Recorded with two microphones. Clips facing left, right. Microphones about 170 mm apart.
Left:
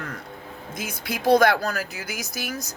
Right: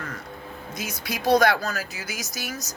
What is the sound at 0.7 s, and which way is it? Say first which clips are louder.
Speech: left 1 dB; 55° left (ahead or behind).